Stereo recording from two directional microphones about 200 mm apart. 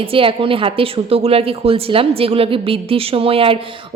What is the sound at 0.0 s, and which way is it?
Speech, 25° right (ahead or behind).